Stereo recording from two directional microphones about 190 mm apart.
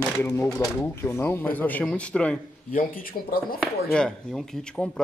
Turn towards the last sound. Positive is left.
turn(degrees=5)  # may be behind; listen again after turning